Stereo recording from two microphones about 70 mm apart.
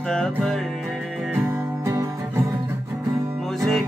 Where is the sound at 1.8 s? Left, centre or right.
Right.